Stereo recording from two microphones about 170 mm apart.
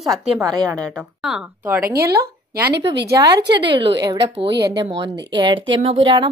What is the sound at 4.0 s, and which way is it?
Speech, 25° right (ahead or behind).